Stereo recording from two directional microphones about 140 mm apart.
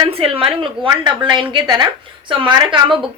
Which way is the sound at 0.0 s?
45° right (ahead or behind).